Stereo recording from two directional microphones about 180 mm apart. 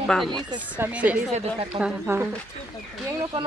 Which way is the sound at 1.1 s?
35° right (ahead or behind).